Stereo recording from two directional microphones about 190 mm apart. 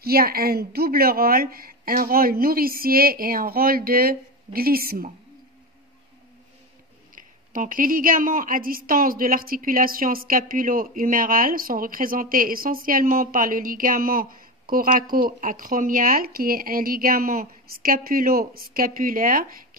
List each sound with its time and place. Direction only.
0.0 s a woman's voice: 50° right (ahead or behind)
7.2 s a woman's voice: 45° right (ahead or behind)